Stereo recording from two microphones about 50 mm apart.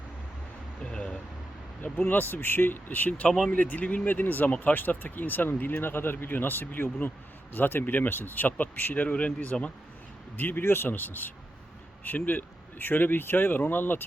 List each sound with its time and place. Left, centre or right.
0.9 s vehicle: centre
2.0 s speech: left
10.3 s speech: left